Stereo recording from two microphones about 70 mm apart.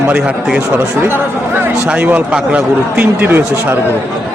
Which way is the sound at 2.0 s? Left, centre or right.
Right.